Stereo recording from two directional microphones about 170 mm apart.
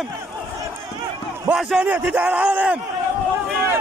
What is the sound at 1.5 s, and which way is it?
A man's voice, 5° right (ahead or behind).